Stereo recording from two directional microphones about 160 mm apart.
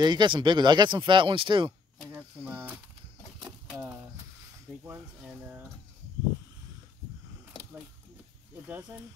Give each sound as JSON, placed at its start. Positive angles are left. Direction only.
{"t": 0.0, "sound": "speech", "side_deg": -30}
{"t": 2.0, "sound": "speech", "side_deg": -10}
{"t": 3.3, "sound": "a sound", "side_deg": -5}
{"t": 4.7, "sound": "speech", "side_deg": -10}
{"t": 8.6, "sound": "speech", "side_deg": -10}